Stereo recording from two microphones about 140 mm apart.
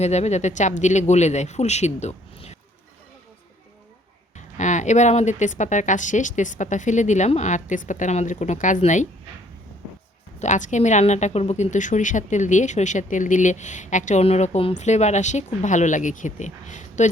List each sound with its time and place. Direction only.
0.0 s speech: 55° left (ahead or behind)
4.4 s speech: 60° left (ahead or behind)
10.4 s speech: 60° left (ahead or behind)